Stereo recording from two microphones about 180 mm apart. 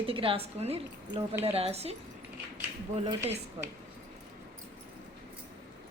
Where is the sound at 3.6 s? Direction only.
30° right (ahead or behind).